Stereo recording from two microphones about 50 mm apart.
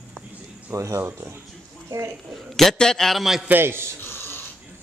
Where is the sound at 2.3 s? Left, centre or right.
Centre.